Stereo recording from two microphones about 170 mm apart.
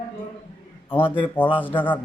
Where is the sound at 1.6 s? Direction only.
10° left (ahead or behind).